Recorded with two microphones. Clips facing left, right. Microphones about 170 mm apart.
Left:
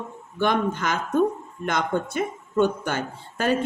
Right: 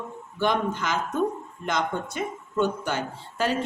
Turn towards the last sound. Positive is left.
turn(degrees=50)  # may be behind; listen again after turning